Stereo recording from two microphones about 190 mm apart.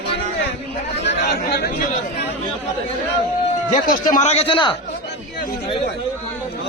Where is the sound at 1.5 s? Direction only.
50° left (ahead or behind).